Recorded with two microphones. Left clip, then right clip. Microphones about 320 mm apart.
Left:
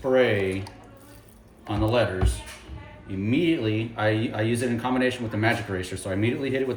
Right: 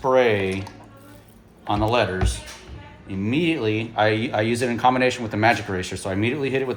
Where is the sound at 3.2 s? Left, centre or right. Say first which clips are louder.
Right 2 dB; centre.